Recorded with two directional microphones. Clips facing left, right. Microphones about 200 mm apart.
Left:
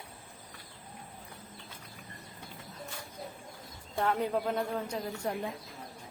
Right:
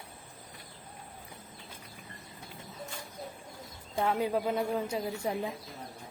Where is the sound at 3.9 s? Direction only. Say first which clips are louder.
Right 1 dB; 5° right (ahead or behind).